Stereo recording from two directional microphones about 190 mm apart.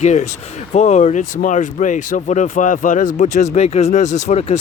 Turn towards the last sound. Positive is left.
turn(degrees=35)  # may be behind; listen again after turning